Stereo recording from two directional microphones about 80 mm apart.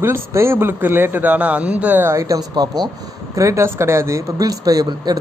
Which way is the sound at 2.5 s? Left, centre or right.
Right.